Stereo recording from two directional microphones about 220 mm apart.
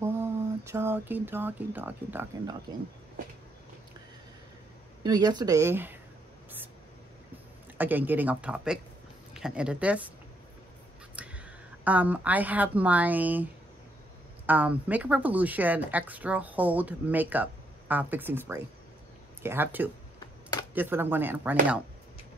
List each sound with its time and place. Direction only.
0.0 s speech: 10° right (ahead or behind)
5.0 s speech: 20° right (ahead or behind)
7.7 s speech: 10° right (ahead or behind)
11.1 s speech: 5° right (ahead or behind)
20.2 s typewriter: 15° left (ahead or behind)
20.7 s speech: 10° right (ahead or behind)